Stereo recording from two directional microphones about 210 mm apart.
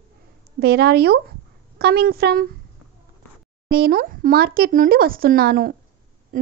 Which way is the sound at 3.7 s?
45° right (ahead or behind).